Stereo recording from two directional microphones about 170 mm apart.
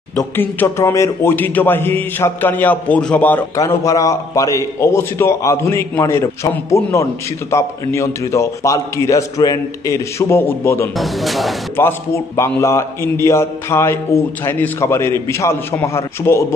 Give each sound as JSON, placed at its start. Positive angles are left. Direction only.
{"t": 0.2, "sound": "a man's voice", "side_deg": 15}
{"t": 11.0, "sound": "speech", "side_deg": 0}
{"t": 11.8, "sound": "a man's voice", "side_deg": 15}